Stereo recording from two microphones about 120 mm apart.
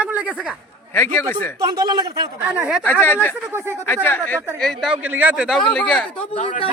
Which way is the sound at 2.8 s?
15° left (ahead or behind).